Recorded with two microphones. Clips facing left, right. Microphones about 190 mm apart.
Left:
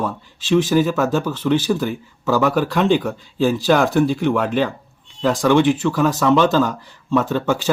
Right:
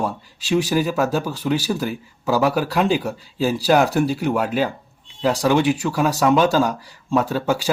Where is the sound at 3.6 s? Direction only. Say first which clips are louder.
Right 1 dB; 35° right (ahead or behind).